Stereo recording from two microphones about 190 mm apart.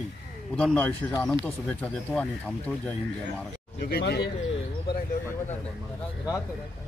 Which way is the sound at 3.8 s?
55° left (ahead or behind).